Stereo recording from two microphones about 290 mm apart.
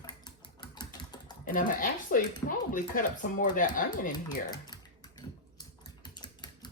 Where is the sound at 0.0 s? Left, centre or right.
Centre.